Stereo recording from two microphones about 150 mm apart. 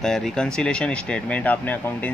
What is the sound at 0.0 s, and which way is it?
Speech, 5° left (ahead or behind).